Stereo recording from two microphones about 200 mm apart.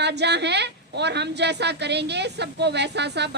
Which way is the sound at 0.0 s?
55° right (ahead or behind).